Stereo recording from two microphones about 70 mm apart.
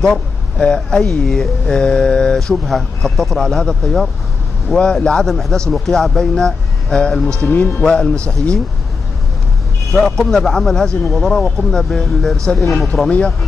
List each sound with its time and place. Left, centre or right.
0.0 s speech: centre
7.3 s speech: left
7.8 s speech: centre
9.9 s speech: centre